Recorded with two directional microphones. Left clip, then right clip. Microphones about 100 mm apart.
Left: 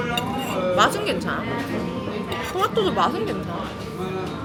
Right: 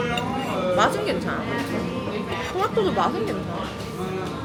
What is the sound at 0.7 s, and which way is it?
Speech, 20° left (ahead or behind).